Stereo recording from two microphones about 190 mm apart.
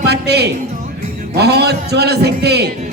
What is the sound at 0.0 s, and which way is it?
A man's voice, 60° right (ahead or behind).